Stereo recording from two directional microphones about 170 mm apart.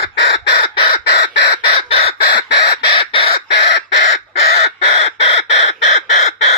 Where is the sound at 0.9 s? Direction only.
75° left (ahead or behind).